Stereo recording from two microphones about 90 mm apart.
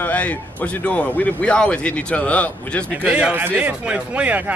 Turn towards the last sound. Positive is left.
turn(degrees=-15)  # may be behind; listen again after turning